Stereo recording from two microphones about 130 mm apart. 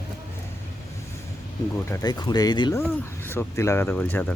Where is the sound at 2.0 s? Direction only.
30° left (ahead or behind).